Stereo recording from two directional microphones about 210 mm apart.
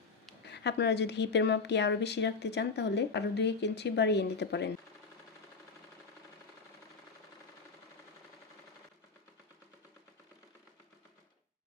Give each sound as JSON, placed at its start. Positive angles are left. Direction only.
{"t": 0.4, "sound": "a woman's voice", "side_deg": 55}